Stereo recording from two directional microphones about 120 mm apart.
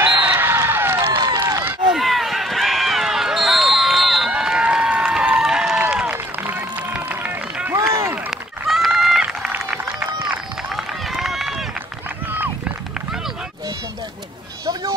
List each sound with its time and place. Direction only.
0.2 s a sound: 15° right (ahead or behind)
2.0 s run: centre (ahead or behind); by 8.2 s 20° right (ahead or behind)
8.6 s run: centre (ahead or behind)